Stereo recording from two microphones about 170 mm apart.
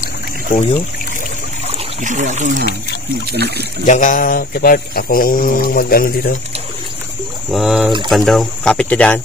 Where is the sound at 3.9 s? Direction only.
50° left (ahead or behind).